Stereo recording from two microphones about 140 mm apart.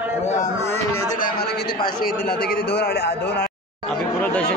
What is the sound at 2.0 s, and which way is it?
Speech, 90° left.